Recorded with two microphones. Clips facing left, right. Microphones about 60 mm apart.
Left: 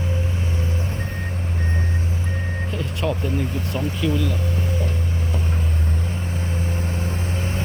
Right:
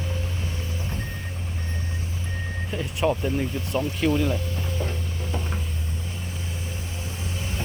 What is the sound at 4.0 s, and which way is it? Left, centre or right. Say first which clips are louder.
Speech: right 1 dB; right.